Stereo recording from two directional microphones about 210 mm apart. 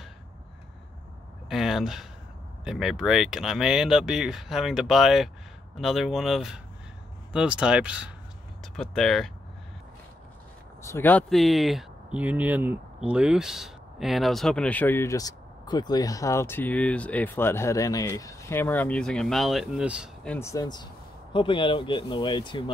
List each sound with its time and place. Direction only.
1.5 s speech: centre (ahead or behind)
10.8 s speech: 10° left (ahead or behind); by 20.1 s 5° right (ahead or behind)
20.2 s speech: 10° left (ahead or behind)